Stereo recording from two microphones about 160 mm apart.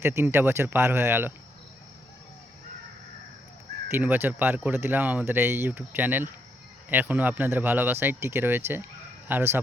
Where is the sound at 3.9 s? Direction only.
15° right (ahead or behind).